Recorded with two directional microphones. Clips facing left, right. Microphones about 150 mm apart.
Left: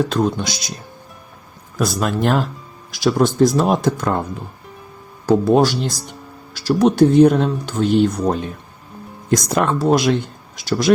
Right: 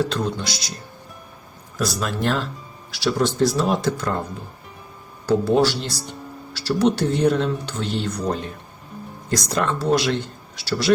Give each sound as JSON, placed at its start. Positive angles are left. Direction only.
{"t": 0.0, "sound": "speech", "side_deg": 50}
{"t": 1.8, "sound": "speech", "side_deg": 50}
{"t": 5.2, "sound": "speech", "side_deg": 50}